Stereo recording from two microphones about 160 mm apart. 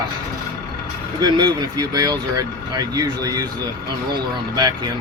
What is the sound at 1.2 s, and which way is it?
Speech, 25° right (ahead or behind).